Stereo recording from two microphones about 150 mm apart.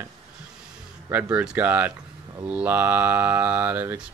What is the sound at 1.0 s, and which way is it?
Speech, 10° right (ahead or behind).